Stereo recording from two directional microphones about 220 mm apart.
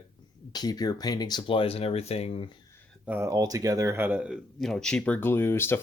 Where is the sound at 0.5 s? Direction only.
20° left (ahead or behind).